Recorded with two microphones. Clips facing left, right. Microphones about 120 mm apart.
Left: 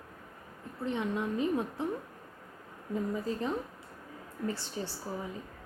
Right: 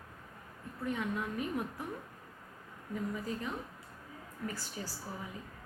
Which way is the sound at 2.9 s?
30° left (ahead or behind).